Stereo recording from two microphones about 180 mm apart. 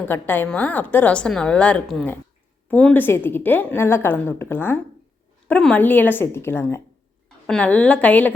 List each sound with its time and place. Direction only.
0.1 s a woman's voice: 10° left (ahead or behind)